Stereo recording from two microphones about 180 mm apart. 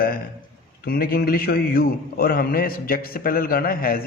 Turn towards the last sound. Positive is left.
turn(degrees=55)  # may be behind; listen again after turning